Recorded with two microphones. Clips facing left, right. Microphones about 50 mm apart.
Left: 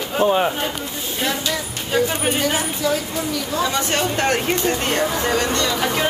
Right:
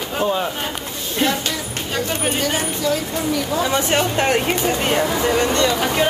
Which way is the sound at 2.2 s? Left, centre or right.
Centre.